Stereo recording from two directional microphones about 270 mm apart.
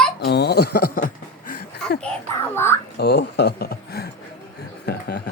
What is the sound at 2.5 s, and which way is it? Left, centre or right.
Speech, centre.